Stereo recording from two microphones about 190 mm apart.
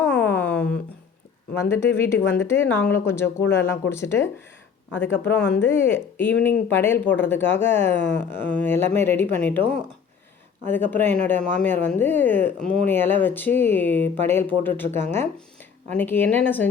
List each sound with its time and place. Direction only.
0.0 s a sound: 5° left (ahead or behind)
1.5 s speech: 15° left (ahead or behind)
10.7 s speech: 10° left (ahead or behind)